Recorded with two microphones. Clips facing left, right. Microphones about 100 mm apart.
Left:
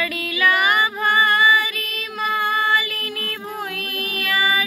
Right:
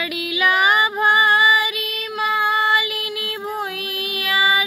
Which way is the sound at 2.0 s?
5° right (ahead or behind).